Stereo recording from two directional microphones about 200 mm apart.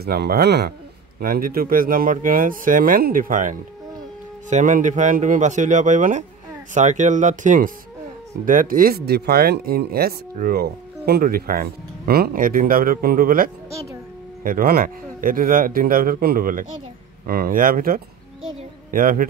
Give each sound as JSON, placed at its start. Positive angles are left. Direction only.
{"t": 0.0, "sound": "speech", "side_deg": -50}